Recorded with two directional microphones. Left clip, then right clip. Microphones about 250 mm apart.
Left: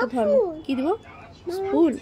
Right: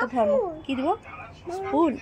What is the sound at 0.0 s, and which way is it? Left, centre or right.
Speech, centre.